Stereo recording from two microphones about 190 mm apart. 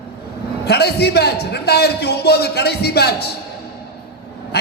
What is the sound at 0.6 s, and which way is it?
A man's voice, 60° left (ahead or behind).